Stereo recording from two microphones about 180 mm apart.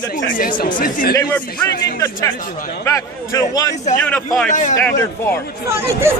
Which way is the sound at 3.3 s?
20° left (ahead or behind).